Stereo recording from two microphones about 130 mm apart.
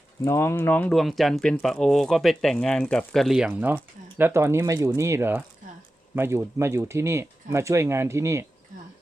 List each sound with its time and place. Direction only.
0.3 s speech: 20° left (ahead or behind)
0.9 s speech: centre (ahead or behind); by 8.4 s 20° right (ahead or behind)